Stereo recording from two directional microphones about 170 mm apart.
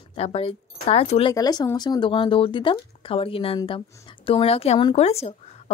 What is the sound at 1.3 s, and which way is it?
Speech, 25° left (ahead or behind).